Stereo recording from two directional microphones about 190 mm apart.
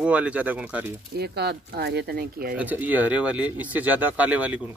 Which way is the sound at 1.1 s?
60° right (ahead or behind).